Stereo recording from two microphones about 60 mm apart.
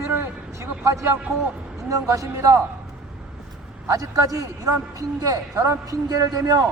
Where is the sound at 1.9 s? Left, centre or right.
Right.